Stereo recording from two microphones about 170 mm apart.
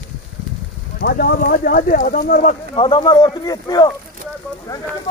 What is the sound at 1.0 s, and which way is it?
Speech, 65° left (ahead or behind).